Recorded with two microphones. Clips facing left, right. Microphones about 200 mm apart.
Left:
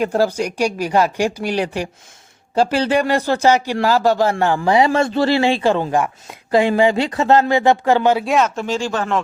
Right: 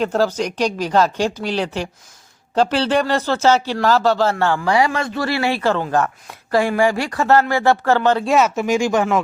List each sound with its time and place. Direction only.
0.0 s speech: 10° left (ahead or behind); by 9.2 s 10° right (ahead or behind)